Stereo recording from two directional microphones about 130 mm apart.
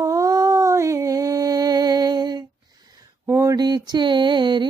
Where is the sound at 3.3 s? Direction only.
25° right (ahead or behind).